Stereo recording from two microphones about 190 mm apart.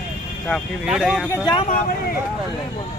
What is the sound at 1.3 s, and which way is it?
Speech, 20° left (ahead or behind).